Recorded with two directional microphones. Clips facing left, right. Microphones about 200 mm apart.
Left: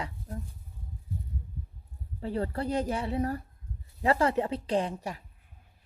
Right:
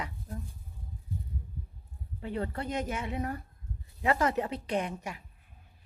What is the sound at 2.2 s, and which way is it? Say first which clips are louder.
Speech: left 3 dB; 35° left (ahead or behind).